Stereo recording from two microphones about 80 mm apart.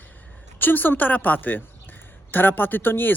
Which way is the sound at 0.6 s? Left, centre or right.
Left.